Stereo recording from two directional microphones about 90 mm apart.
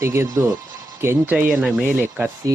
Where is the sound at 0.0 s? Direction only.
30° right (ahead or behind).